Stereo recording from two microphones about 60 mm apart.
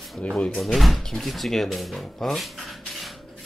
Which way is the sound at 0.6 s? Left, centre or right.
Centre.